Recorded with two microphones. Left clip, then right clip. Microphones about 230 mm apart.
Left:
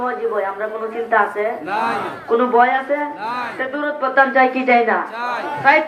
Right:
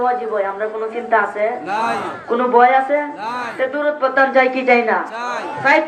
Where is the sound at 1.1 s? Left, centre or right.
Right.